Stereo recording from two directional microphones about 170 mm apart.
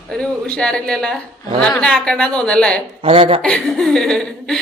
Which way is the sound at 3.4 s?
5° left (ahead or behind).